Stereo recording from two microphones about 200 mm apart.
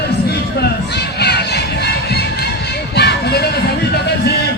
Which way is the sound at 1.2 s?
55° left (ahead or behind).